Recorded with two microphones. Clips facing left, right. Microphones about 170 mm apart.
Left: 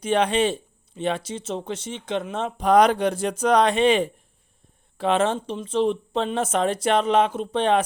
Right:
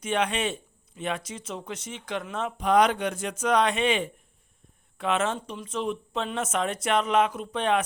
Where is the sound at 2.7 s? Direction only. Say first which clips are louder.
Left 5 dB; 40° left (ahead or behind).